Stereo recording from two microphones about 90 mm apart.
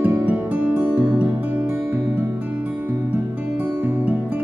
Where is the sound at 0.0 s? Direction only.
20° right (ahead or behind).